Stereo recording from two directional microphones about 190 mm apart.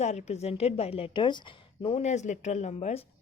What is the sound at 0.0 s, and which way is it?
A woman's voice, 35° left (ahead or behind).